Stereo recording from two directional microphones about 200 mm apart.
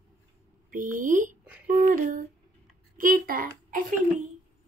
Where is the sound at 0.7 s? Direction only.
45° right (ahead or behind).